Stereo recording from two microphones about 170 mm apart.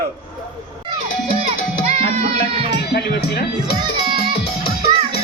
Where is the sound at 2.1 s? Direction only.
35° right (ahead or behind).